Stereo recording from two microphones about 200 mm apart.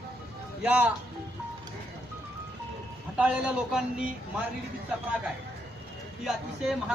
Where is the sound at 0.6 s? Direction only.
5° right (ahead or behind).